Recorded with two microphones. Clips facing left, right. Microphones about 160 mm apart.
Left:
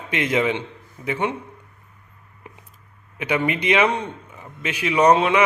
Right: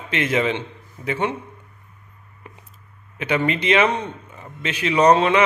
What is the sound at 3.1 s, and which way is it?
A man's voice, 10° left (ahead or behind).